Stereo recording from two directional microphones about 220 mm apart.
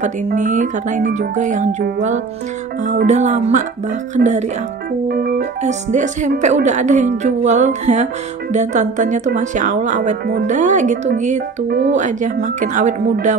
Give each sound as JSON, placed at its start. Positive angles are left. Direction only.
{"t": 0.0, "sound": "speech", "side_deg": -35}
{"t": 5.0, "sound": "keyboard", "side_deg": -45}
{"t": 5.6, "sound": "speech", "side_deg": -35}